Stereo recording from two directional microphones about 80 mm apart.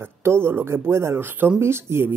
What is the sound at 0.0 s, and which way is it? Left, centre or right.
Speech, right.